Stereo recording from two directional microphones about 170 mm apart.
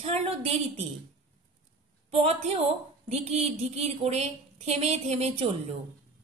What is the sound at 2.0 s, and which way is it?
A woman's voice, 40° right (ahead or behind).